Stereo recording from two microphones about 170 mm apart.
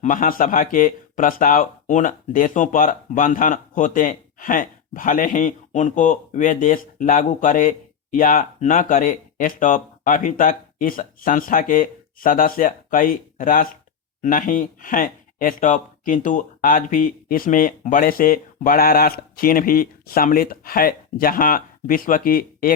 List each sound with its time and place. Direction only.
0.0 s speech: 50° left (ahead or behind)